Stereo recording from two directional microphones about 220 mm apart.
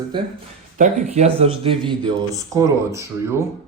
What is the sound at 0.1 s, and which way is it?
Speech, 20° right (ahead or behind).